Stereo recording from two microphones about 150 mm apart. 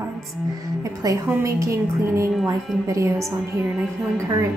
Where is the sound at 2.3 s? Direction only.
Centre (ahead or behind).